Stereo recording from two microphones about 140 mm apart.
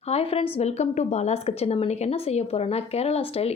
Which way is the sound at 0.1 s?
45° left (ahead or behind).